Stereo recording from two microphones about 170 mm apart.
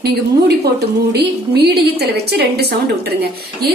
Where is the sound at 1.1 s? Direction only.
75° right (ahead or behind).